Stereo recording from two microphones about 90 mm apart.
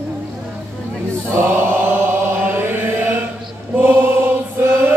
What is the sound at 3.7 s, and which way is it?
Mantra, 20° right (ahead or behind).